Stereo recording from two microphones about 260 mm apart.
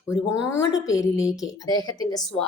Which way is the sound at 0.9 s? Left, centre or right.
Centre.